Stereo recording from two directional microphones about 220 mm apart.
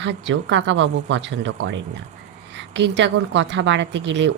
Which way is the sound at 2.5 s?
50° right (ahead or behind).